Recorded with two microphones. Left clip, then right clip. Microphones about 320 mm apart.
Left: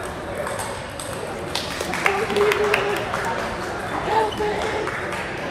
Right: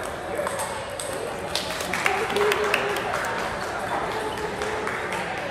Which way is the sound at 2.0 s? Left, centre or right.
Left.